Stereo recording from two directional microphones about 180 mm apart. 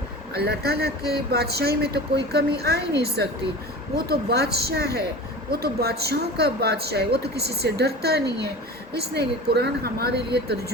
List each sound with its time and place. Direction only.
0.3 s speech: 60° right (ahead or behind)